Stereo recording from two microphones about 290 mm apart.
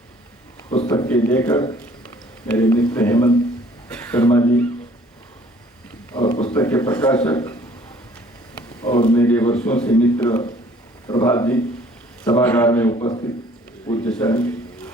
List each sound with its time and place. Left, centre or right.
0.9 s a man's voice: centre
6.5 s a man's voice: centre
8.8 s a man's voice: centre
12.9 s a man's voice: centre
14.0 s a sound: centre